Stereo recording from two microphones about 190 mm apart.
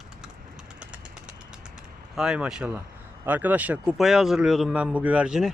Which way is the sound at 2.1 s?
5° right (ahead or behind).